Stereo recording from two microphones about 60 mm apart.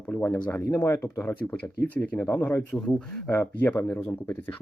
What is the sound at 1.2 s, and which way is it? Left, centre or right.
Speech, left.